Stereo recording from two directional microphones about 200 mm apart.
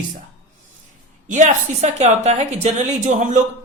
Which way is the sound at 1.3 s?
35° right (ahead or behind).